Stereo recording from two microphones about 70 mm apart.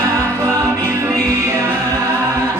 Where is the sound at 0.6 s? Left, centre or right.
Right.